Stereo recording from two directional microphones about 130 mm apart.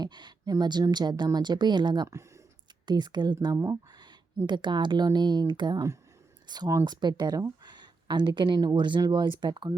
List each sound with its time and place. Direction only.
0.0 s speech: 35° right (ahead or behind)
4.4 s speech: 35° right (ahead or behind)